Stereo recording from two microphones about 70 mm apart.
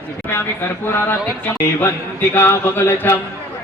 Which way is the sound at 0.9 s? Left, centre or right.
Left.